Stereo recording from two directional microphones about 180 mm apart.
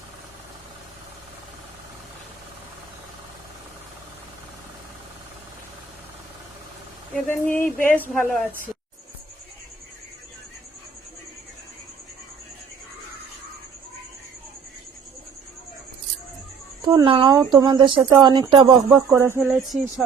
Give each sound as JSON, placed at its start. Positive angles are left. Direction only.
{"t": 7.3, "sound": "a woman's voice", "side_deg": 10}
{"t": 7.6, "sound": "a sound", "side_deg": 50}
{"t": 7.9, "sound": "a woman's voice", "side_deg": 10}
{"t": 16.8, "sound": "speech", "side_deg": -20}
{"t": 19.1, "sound": "speech", "side_deg": -15}
{"t": 19.5, "sound": "a sound", "side_deg": 0}